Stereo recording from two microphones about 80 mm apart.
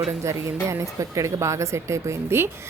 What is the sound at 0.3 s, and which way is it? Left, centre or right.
Speech, right.